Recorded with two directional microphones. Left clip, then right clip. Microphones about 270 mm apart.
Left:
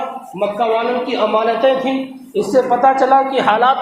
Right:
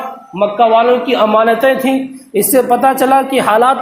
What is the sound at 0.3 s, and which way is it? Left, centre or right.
A man's voice, right.